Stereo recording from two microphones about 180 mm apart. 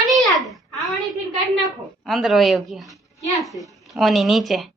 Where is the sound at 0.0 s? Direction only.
Centre (ahead or behind).